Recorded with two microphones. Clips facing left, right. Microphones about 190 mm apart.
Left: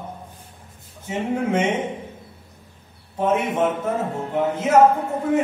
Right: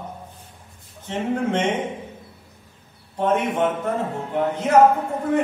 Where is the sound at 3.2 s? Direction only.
5° left (ahead or behind).